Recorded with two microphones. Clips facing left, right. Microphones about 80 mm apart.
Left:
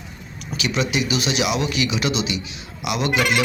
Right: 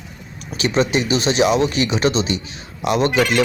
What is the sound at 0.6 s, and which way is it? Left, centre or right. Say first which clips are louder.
Speech: right 5 dB; right.